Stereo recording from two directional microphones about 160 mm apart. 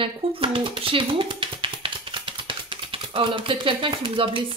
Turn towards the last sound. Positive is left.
turn(degrees=-35)  # may be behind; listen again after turning